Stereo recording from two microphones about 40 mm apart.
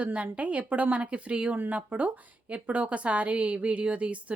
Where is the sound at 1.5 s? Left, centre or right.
Right.